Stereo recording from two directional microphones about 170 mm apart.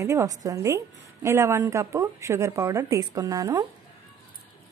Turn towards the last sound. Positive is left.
turn(degrees=-20)  # may be behind; listen again after turning